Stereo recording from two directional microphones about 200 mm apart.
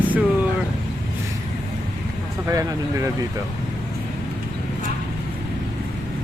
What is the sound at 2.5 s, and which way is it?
Speech, 15° right (ahead or behind).